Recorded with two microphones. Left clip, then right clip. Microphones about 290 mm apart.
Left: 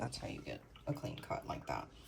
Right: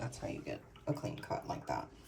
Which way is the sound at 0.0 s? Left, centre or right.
Centre.